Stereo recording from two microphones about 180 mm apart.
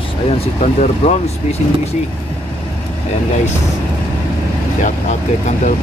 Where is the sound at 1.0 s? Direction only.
35° left (ahead or behind).